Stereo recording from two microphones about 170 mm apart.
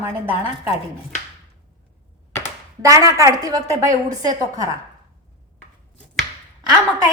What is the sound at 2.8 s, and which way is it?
A woman's voice, 20° right (ahead or behind).